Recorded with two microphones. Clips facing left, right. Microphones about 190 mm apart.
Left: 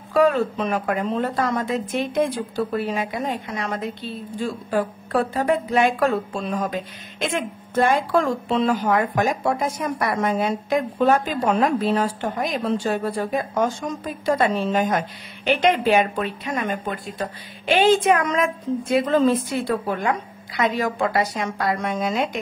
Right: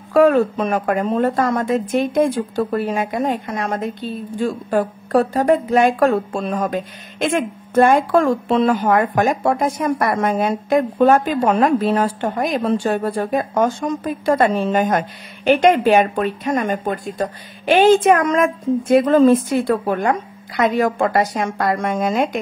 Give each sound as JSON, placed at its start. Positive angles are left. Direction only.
{"t": 0.1, "sound": "speech", "side_deg": -50}